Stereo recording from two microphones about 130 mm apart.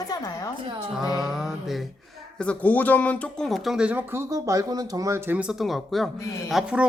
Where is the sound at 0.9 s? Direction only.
5° right (ahead or behind).